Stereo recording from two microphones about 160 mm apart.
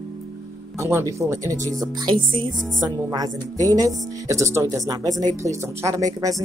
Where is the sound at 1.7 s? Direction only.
25° right (ahead or behind).